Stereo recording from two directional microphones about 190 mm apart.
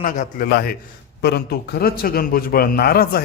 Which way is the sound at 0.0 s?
45° left (ahead or behind).